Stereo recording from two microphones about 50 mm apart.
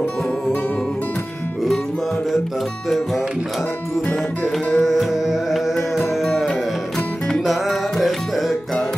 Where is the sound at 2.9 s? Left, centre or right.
Centre.